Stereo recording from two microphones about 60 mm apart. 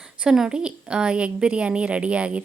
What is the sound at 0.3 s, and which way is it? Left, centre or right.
A woman's voice, centre.